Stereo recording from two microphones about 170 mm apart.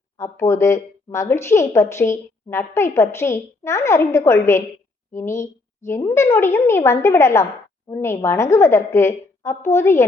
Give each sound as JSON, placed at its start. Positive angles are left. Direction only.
{"t": 0.2, "sound": "speech", "side_deg": 15}